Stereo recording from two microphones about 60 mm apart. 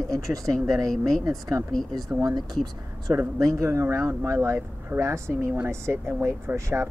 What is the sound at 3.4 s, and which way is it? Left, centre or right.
Speech, right.